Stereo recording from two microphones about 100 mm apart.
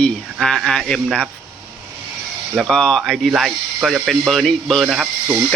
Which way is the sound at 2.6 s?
5° left (ahead or behind).